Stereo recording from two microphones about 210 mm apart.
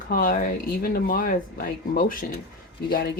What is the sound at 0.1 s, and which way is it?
Speech, 40° left (ahead or behind).